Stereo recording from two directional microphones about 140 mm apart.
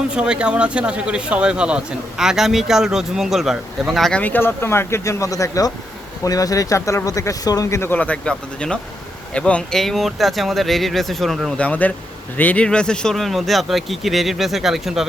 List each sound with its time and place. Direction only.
0.1 s speech: 5° right (ahead or behind)
4.2 s speech: 15° left (ahead or behind); by 15.0 s centre (ahead or behind)